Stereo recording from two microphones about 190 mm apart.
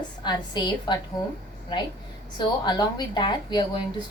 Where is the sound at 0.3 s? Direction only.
25° left (ahead or behind).